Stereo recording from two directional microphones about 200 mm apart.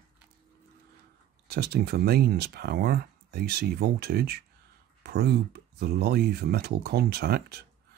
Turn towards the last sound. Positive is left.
turn(degrees=-50)  # may be behind; listen again after turning